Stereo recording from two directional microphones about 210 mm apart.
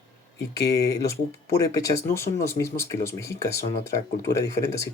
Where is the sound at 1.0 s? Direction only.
15° left (ahead or behind).